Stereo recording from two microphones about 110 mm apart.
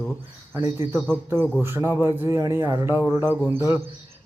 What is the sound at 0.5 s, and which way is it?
Speech, 20° right (ahead or behind).